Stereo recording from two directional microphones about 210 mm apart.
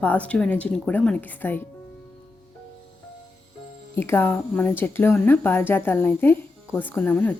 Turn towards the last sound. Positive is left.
turn(degrees=5)  # may be behind; listen again after turning